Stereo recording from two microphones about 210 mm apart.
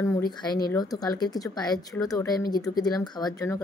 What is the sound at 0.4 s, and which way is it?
A woman's voice, 20° left (ahead or behind).